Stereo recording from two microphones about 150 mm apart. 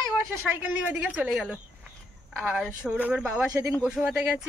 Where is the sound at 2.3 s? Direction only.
10° right (ahead or behind).